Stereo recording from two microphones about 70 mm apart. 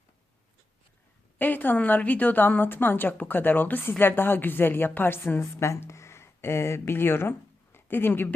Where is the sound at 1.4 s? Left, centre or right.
Left.